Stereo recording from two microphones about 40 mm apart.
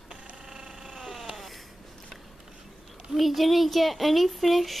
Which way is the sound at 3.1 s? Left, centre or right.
Centre.